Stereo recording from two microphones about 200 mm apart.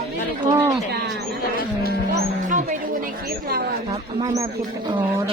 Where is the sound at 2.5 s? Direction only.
40° right (ahead or behind).